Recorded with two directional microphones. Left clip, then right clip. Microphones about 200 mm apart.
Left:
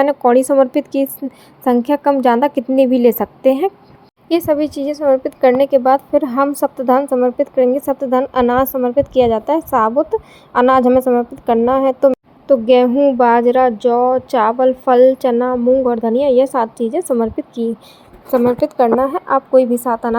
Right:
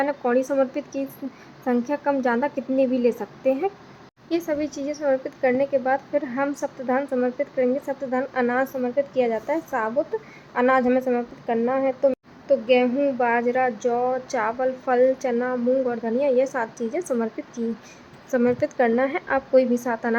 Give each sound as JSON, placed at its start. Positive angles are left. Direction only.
{"t": 0.0, "sound": "speech", "side_deg": 35}
{"t": 7.1, "sound": "a woman's voice", "side_deg": 25}
{"t": 7.3, "sound": "a child's voice", "side_deg": 35}